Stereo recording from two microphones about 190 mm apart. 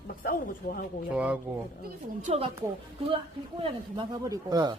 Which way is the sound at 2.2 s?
30° right (ahead or behind).